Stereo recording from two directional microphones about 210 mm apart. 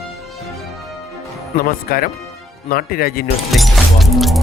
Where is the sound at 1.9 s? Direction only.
45° left (ahead or behind).